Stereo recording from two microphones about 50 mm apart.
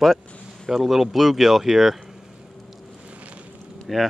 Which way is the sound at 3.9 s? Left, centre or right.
Centre.